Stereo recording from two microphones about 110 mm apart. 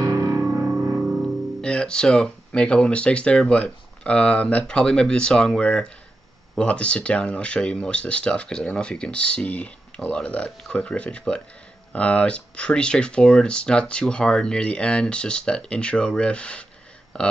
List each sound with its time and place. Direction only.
0.0 s music: 30° right (ahead or behind)
0.7 s music: 10° right (ahead or behind)
1.6 s speech: 5° left (ahead or behind)